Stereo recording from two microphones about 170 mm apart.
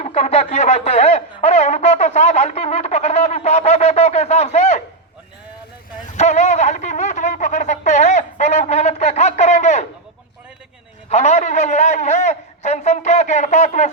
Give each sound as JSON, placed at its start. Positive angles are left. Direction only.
{"t": 0.0, "sound": "speech", "side_deg": 35}
{"t": 6.1, "sound": "a sound", "side_deg": 40}
{"t": 11.1, "sound": "a man's voice", "side_deg": 40}